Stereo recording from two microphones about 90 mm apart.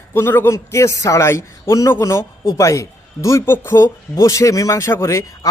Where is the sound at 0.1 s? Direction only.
25° left (ahead or behind).